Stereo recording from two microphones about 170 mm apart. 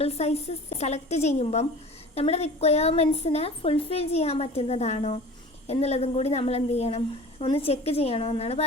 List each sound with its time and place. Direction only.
0.0 s a woman's voice: 40° left (ahead or behind)